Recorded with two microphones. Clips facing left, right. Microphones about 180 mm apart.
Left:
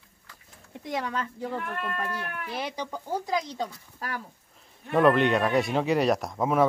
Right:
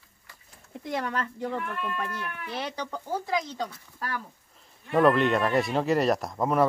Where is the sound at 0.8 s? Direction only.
Centre (ahead or behind).